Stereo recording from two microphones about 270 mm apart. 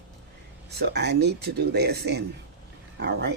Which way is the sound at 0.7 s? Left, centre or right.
Right.